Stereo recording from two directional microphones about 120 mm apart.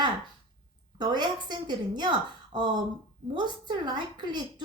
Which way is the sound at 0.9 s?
35° right (ahead or behind).